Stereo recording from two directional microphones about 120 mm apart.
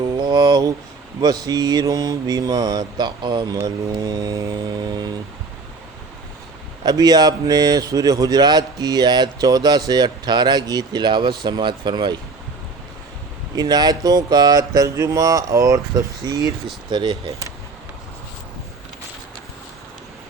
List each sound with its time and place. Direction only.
0.2 s a sound: 35° right (ahead or behind)
1.2 s speech: 30° right (ahead or behind)
6.8 s speech: 30° right (ahead or behind)
13.6 s speech: 35° right (ahead or behind)
16.9 s speech: 40° right (ahead or behind)